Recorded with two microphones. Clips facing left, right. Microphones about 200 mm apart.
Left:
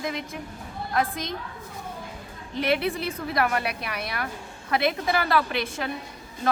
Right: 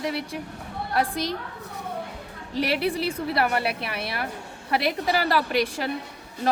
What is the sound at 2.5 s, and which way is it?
A woman's voice, 35° right (ahead or behind).